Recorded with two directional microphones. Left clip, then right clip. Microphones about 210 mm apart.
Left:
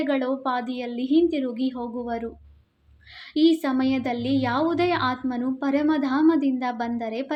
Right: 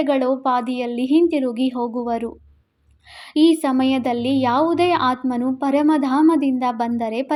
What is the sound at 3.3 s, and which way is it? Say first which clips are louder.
Speech: right 5 dB; 35° right (ahead or behind).